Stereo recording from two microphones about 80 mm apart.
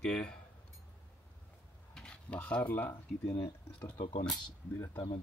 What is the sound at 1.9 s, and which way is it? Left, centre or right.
Speech, centre.